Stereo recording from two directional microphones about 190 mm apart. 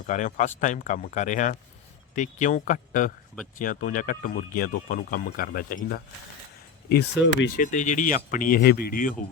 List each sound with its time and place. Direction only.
0.1 s speech: 40° left (ahead or behind)
6.8 s speech: 60° left (ahead or behind)
7.5 s speech: 40° left (ahead or behind)